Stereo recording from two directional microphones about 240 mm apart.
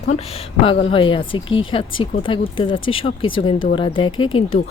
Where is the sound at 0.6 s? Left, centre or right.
Left.